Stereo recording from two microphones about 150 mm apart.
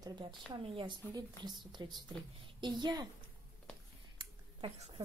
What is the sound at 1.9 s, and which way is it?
Speech, centre (ahead or behind).